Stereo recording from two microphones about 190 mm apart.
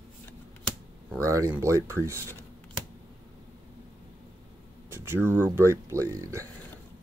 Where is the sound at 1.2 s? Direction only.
15° right (ahead or behind).